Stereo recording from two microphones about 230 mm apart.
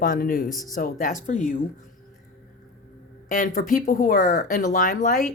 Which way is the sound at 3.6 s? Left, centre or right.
Left.